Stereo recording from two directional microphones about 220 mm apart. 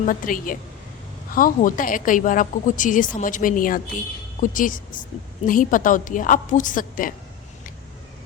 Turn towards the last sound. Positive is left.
turn(degrees=40)  # may be behind; listen again after turning